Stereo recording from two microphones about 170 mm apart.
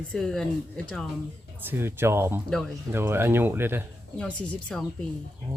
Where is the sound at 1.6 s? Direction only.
15° right (ahead or behind).